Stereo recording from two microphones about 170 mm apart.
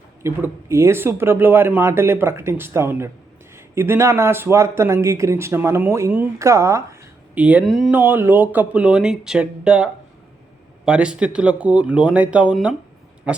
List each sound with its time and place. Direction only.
0.2 s speech: 15° right (ahead or behind)